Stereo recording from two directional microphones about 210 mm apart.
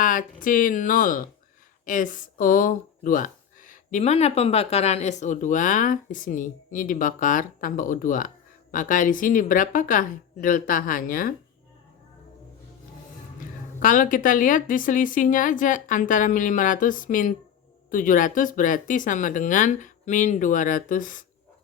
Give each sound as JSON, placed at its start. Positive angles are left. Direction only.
{"t": 0.0, "sound": "speech", "side_deg": 40}
{"t": 13.7, "sound": "speech", "side_deg": 40}